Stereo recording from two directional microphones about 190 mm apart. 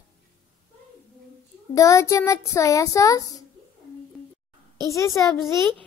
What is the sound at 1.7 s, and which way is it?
A child's voice, 15° left (ahead or behind).